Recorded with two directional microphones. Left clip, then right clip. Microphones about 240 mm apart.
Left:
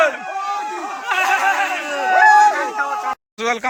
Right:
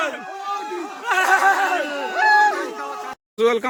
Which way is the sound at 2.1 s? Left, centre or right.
Left.